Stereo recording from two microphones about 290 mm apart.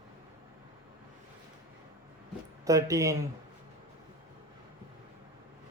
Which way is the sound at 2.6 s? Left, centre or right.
Centre.